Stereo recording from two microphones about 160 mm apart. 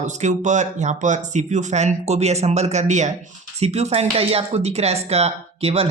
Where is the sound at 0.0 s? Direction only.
45° right (ahead or behind).